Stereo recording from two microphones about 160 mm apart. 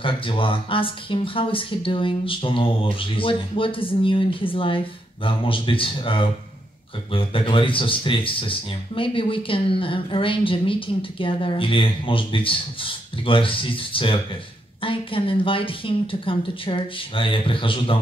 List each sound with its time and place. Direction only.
0.0 s speech: 35° left (ahead or behind)